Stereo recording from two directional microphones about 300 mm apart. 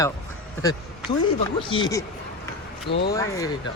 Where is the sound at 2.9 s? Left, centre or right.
Left.